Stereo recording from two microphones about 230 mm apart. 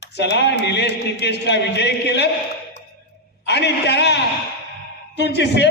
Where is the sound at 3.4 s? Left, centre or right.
Left.